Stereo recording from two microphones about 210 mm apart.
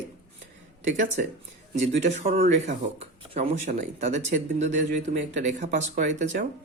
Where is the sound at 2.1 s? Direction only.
40° right (ahead or behind).